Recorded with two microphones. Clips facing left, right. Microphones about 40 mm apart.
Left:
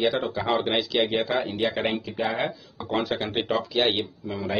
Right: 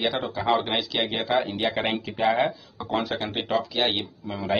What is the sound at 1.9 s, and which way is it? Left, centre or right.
Speech, right.